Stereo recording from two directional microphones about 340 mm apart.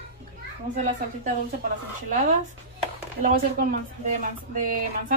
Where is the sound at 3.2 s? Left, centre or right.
Right.